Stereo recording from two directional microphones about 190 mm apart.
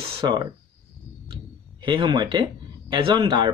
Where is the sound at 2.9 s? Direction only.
25° right (ahead or behind).